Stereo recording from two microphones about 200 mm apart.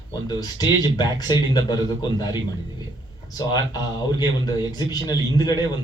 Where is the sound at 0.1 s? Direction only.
20° left (ahead or behind).